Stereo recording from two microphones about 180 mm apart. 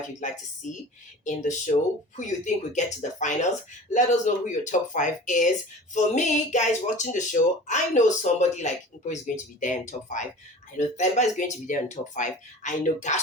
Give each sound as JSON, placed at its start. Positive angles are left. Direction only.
{"t": 0.2, "sound": "speech", "side_deg": 45}